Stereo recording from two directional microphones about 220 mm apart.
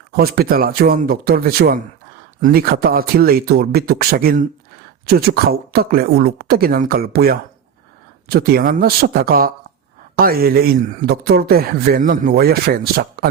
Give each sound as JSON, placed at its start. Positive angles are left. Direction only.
{"t": 0.2, "sound": "speech", "side_deg": -45}